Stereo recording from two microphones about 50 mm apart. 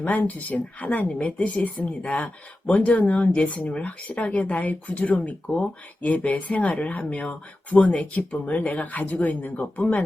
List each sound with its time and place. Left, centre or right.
0.0 s speech: left